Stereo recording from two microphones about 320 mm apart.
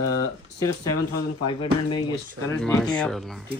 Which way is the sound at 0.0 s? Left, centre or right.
Centre.